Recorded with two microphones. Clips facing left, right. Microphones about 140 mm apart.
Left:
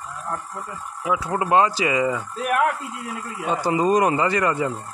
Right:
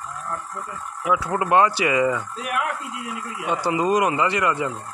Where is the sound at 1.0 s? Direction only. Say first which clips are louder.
Right 1 dB; 25° left (ahead or behind).